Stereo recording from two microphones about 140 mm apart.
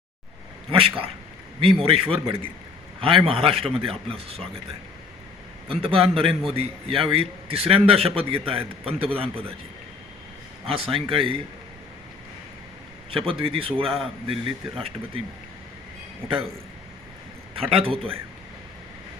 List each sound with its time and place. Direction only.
1.6 s a man's voice: 40° right (ahead or behind)
5.6 s a man's voice: 40° right (ahead or behind)
10.7 s a man's voice: 40° right (ahead or behind)
13.1 s a man's voice: 40° right (ahead or behind)
17.5 s a man's voice: 40° right (ahead or behind)